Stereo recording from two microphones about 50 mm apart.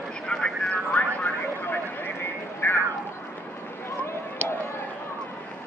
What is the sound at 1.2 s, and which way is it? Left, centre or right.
Speech, left.